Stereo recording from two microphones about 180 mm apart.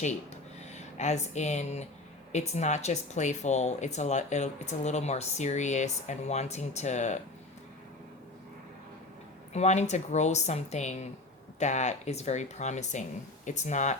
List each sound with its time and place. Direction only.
0.7 s speech: 40° left (ahead or behind)
9.5 s speech: 40° left (ahead or behind)